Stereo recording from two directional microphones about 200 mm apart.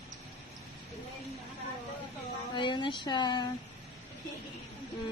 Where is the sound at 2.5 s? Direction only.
25° left (ahead or behind).